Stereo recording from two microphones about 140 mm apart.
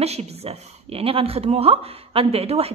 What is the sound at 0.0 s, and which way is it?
Speech, 50° right (ahead or behind).